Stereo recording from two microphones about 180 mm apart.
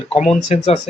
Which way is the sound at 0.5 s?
40° left (ahead or behind).